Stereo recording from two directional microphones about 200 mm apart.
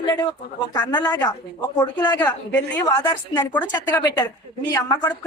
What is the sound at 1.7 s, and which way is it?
Speech, 20° left (ahead or behind).